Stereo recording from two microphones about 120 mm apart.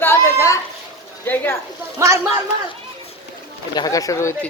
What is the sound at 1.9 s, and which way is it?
Speech, 25° right (ahead or behind).